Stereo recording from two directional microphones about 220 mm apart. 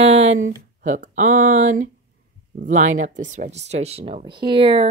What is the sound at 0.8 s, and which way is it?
Speech, 35° right (ahead or behind).